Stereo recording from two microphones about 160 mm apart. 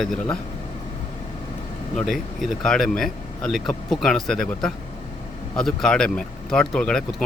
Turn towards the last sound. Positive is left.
turn(degrees=5)  # may be behind; listen again after turning